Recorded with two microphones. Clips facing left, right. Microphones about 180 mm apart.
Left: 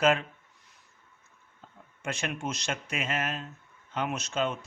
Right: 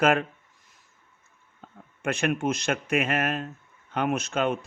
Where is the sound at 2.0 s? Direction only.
55° right (ahead or behind).